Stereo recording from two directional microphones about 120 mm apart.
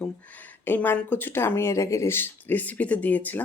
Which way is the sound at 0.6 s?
15° left (ahead or behind).